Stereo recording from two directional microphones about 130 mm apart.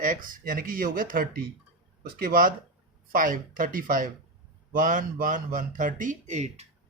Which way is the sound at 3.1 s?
90° right.